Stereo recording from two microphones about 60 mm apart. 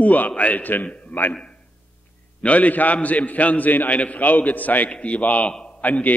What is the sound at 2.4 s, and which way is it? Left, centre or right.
A man's voice, left.